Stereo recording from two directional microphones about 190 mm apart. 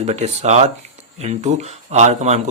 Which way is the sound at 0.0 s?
35° right (ahead or behind).